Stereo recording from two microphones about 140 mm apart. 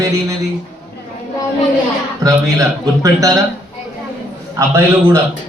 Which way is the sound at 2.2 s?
25° right (ahead or behind).